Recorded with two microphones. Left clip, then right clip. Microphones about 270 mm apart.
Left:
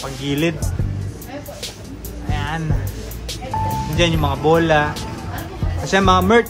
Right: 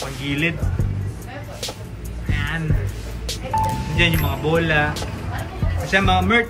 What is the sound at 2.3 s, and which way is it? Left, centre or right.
Music, centre.